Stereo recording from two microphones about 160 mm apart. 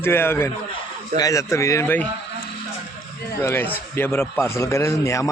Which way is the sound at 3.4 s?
15° left (ahead or behind).